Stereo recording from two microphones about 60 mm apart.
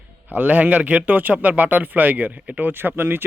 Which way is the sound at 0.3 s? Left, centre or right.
Right.